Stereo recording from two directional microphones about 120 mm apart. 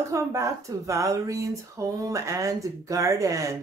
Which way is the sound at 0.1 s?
25° right (ahead or behind).